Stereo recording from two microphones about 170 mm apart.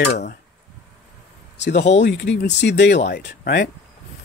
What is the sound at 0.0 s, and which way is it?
Speech, 75° left (ahead or behind).